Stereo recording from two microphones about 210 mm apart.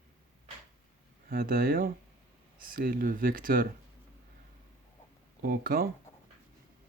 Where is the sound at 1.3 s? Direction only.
45° right (ahead or behind).